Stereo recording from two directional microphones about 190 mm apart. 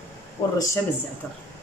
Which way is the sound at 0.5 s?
15° left (ahead or behind).